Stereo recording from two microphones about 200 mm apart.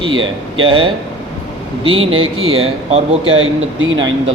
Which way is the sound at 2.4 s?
90° right.